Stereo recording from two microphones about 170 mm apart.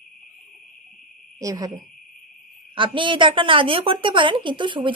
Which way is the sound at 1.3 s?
20° right (ahead or behind).